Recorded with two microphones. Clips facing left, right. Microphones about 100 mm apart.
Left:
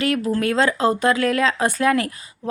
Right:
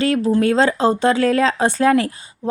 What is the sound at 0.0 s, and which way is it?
Speech, 30° right (ahead or behind).